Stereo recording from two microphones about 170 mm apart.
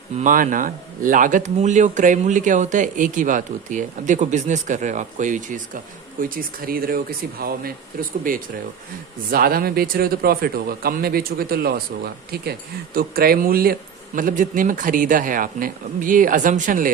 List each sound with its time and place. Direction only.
0.2 s speech: 50° right (ahead or behind)
9.3 s speech: 60° right (ahead or behind)